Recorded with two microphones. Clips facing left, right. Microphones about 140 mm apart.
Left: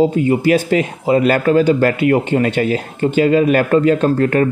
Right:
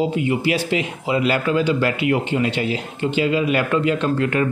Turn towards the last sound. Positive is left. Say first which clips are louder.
# left 6 dB
turn(degrees=45)  # may be behind; listen again after turning